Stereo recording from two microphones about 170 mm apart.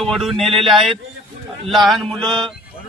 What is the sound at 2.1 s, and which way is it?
Mantra, 30° right (ahead or behind).